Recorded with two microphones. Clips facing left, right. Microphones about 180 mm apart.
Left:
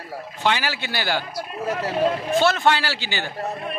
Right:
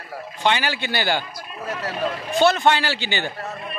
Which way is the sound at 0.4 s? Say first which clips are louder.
Right 1 dB; 5° left (ahead or behind).